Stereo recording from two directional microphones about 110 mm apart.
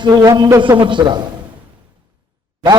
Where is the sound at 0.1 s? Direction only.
25° right (ahead or behind).